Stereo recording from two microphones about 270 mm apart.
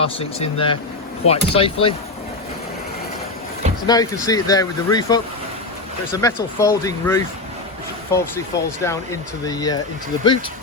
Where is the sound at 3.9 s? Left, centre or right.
Centre.